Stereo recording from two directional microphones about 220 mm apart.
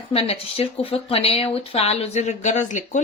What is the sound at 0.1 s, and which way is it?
Speech, 25° left (ahead or behind).